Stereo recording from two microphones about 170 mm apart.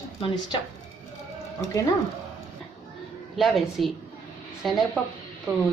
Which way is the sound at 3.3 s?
Centre (ahead or behind).